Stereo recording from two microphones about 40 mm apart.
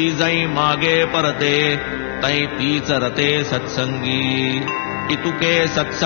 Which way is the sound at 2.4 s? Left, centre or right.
Centre.